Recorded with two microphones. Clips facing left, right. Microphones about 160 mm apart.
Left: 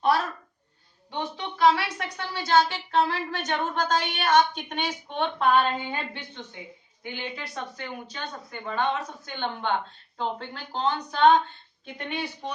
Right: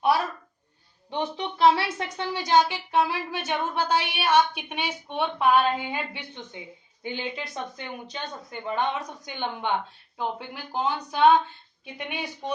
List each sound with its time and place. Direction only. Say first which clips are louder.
1.1 s a woman's voice: right 3 dB; 25° right (ahead or behind)